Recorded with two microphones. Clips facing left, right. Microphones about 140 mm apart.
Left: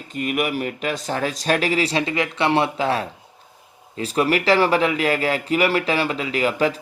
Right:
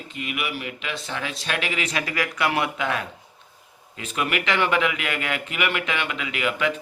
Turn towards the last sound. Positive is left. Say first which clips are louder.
# left 5 dB
turn(degrees=35)  # may be behind; listen again after turning